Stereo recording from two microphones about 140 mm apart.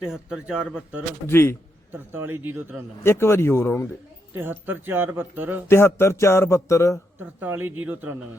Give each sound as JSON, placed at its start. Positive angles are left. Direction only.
{"t": 0.0, "sound": "speech", "side_deg": -5}
{"t": 1.3, "sound": "speech", "side_deg": 15}
{"t": 1.9, "sound": "speech", "side_deg": -15}
{"t": 3.0, "sound": "speech", "side_deg": 20}
{"t": 4.4, "sound": "speech", "side_deg": -15}
{"t": 5.6, "sound": "speech", "side_deg": 20}
{"t": 7.2, "sound": "speech", "side_deg": -15}